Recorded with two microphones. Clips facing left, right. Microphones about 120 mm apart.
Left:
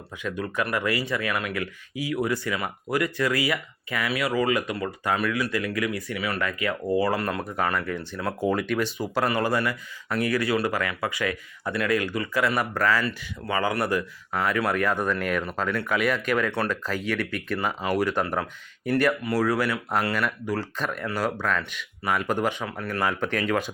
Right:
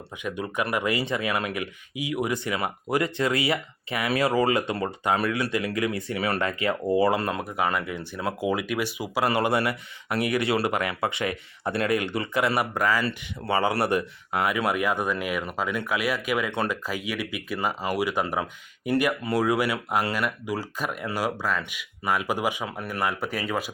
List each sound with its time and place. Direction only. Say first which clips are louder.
0.2 s speech: even; 15° right (ahead or behind)
7.4 s speech: even; 10° right (ahead or behind)
9.3 s speech: right 1 dB; 25° right (ahead or behind)
13.1 s speech: right 2 dB; 25° right (ahead or behind)
14.4 s speech: left 1 dB; 15° right (ahead or behind)